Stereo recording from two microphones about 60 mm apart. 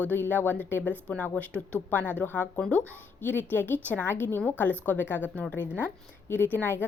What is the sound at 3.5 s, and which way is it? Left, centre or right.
A woman's voice, left.